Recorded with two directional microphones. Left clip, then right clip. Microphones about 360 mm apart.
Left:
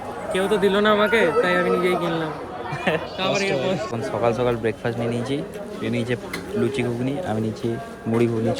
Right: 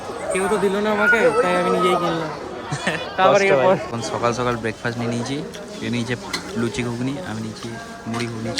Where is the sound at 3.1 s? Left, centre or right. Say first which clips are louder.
Right 8 dB; centre.